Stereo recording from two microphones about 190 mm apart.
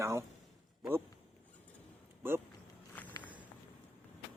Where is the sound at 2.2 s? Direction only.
10° right (ahead or behind).